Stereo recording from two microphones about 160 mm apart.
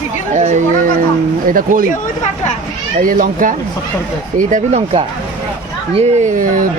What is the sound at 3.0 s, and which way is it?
Speech, 60° right (ahead or behind).